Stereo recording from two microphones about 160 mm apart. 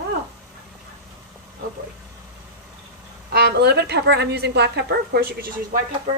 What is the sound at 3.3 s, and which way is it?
A woman's voice, 85° right.